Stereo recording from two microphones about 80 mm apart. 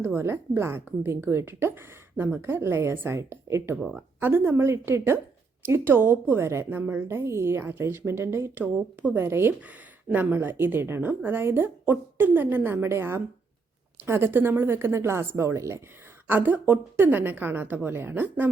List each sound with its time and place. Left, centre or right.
0.0 s a woman's voice: right
3.8 s speech: centre
4.2 s a woman's voice: right
9.6 s a woman's voice: centre; by 15.8 s right
16.3 s a woman's voice: right